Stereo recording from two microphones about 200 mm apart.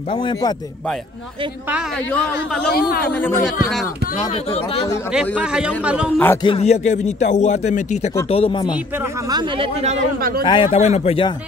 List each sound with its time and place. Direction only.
0.1 s speech: 25° left (ahead or behind)
2.7 s speech: 50° left (ahead or behind)
3.0 s speech: 10° left (ahead or behind)
4.5 s a man's voice: 30° left (ahead or behind)
5.1 s a man's voice: 5° right (ahead or behind)
6.1 s speech: 10° left (ahead or behind)
6.4 s a man's voice: 30° left (ahead or behind)
9.3 s speech: 25° right (ahead or behind)
10.4 s speech: 25° left (ahead or behind)